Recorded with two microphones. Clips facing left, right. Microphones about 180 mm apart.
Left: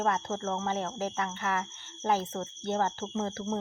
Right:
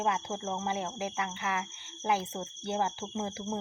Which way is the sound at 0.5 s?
15° right (ahead or behind).